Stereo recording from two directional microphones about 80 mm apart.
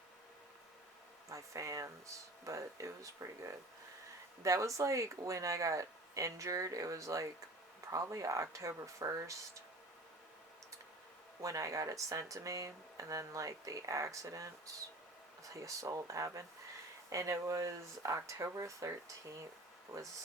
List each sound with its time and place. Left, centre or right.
1.3 s speech: right
11.4 s speech: right
15.6 s speech: right